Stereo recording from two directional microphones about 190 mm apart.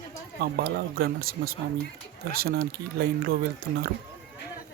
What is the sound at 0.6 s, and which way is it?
Speech, 55° right (ahead or behind).